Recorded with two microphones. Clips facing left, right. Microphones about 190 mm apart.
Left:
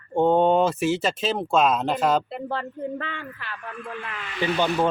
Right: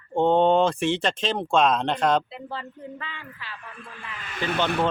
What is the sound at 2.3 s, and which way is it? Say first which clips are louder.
Speech: left 6 dB; 55° left (ahead or behind).